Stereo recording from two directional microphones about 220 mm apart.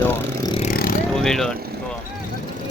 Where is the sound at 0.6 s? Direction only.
40° left (ahead or behind).